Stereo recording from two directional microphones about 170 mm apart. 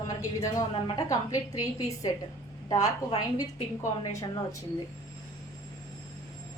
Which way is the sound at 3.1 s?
35° left (ahead or behind).